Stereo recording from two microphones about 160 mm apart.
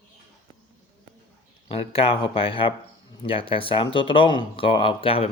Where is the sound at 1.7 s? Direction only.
35° left (ahead or behind).